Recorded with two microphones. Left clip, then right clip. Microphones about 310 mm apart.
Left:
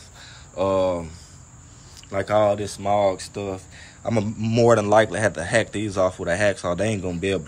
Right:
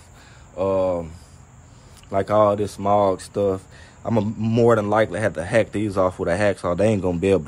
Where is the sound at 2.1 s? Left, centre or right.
Centre.